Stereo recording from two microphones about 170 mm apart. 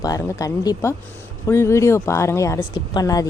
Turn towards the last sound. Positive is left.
turn(degrees=20)  # may be behind; listen again after turning